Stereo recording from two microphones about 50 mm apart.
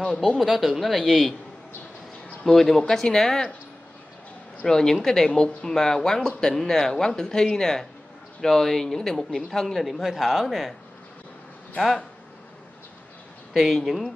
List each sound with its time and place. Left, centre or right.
0.2 s speech: centre
2.4 s speech: centre
4.6 s speech: centre
13.5 s speech: centre